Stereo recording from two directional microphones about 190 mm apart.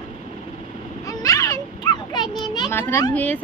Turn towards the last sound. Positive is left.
turn(degrees=10)  # may be behind; listen again after turning